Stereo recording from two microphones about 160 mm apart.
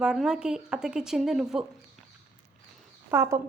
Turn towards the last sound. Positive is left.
turn(degrees=-20)  # may be behind; listen again after turning